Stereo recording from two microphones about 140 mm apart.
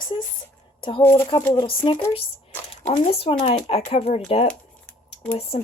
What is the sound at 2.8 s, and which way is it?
Speech, 55° left (ahead or behind).